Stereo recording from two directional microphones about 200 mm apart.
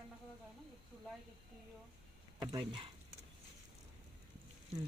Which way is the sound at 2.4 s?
20° right (ahead or behind).